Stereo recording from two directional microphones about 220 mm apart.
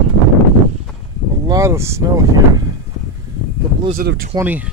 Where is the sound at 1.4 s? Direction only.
15° right (ahead or behind).